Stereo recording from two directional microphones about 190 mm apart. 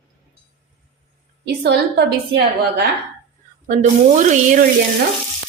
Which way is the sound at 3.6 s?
40° right (ahead or behind).